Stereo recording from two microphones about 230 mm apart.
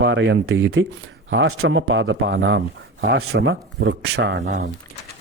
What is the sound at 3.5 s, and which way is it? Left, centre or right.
A man's voice, right.